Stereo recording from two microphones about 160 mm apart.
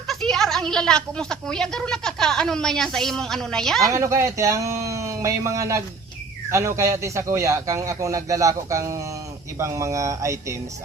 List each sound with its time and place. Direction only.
0.1 s speech: centre (ahead or behind)
3.8 s a man's voice: 20° right (ahead or behind)